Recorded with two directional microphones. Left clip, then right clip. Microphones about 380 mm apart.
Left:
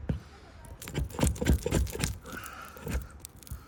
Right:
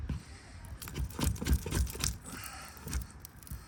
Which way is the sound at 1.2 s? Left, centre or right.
Centre.